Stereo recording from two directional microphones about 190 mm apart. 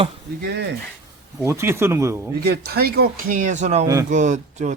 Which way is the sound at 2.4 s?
55° right (ahead or behind).